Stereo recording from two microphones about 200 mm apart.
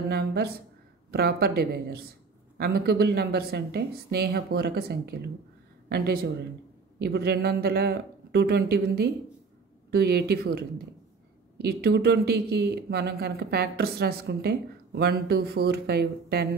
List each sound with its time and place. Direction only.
0.1 s speech: 55° right (ahead or behind)